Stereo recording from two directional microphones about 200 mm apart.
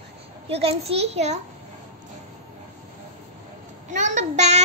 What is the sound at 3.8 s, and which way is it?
Speech, 40° right (ahead or behind).